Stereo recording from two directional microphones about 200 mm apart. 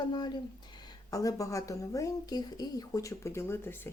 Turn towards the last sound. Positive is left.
turn(degrees=15)  # may be behind; listen again after turning